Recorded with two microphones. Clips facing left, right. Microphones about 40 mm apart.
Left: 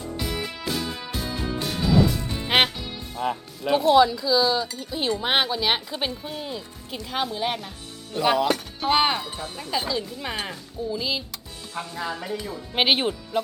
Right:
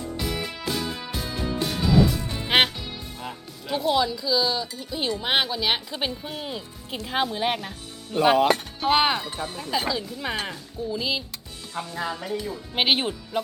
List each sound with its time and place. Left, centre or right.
0.2 s music: centre
3.9 s speech: centre
6.4 s speech: centre
8.8 s speech: centre